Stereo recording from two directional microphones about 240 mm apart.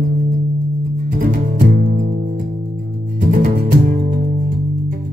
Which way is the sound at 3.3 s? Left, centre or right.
Right.